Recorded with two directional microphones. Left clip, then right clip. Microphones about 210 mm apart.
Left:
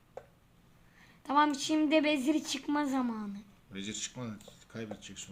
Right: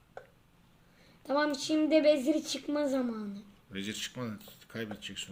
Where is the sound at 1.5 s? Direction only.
20° left (ahead or behind).